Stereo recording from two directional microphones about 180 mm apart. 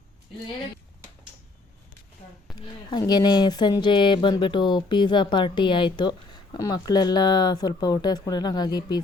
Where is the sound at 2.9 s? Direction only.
20° left (ahead or behind).